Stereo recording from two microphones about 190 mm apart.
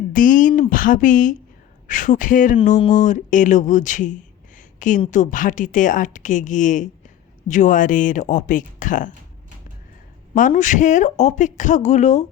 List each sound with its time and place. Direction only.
0.1 s speech: 45° left (ahead or behind)
10.3 s speech: 40° left (ahead or behind)